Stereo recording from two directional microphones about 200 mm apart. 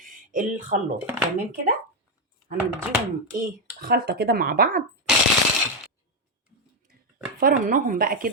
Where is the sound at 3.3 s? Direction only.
45° right (ahead or behind).